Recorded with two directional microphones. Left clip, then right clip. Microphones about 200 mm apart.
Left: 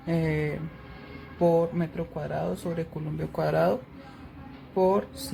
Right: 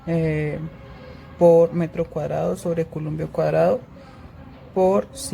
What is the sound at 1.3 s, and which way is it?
Speech, 30° right (ahead or behind).